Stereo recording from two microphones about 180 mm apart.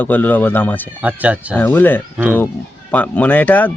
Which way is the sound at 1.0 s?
10° right (ahead or behind).